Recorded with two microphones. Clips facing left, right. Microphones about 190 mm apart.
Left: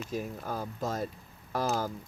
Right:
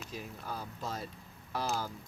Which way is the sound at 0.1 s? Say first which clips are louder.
Left 7 dB; 45° left (ahead or behind).